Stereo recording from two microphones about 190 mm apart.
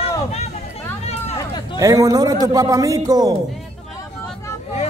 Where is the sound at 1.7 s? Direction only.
15° right (ahead or behind).